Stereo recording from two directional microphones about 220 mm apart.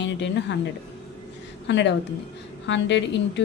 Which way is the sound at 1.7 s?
55° left (ahead or behind).